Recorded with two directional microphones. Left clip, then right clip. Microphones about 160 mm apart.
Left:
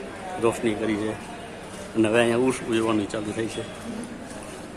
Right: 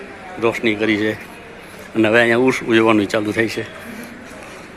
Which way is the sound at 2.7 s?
35° right (ahead or behind).